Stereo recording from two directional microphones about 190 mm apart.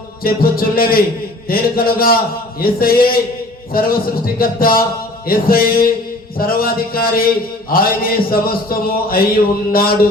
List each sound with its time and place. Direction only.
0.2 s mantra: 50° left (ahead or behind)
3.7 s a man's voice: 50° left (ahead or behind)
4.4 s mantra: 50° left (ahead or behind)